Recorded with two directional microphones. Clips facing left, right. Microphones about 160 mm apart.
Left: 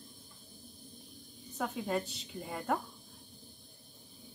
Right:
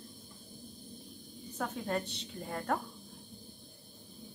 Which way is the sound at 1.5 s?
Centre (ahead or behind).